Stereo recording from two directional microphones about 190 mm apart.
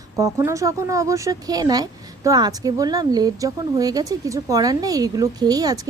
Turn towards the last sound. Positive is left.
turn(degrees=-20)  # may be behind; listen again after turning